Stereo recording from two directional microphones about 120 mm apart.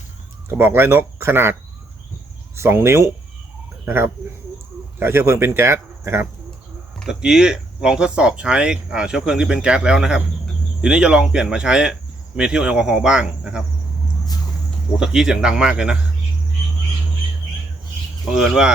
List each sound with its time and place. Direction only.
0.5 s speech: 20° right (ahead or behind)
2.6 s speech: 20° right (ahead or behind)
7.0 s speech: 5° right (ahead or behind)
12.4 s insect: 10° right (ahead or behind)
14.9 s insect: 5° right (ahead or behind)
18.3 s insect: 5° right (ahead or behind)